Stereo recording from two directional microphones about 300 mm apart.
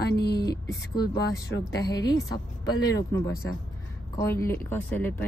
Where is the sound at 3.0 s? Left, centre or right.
Centre.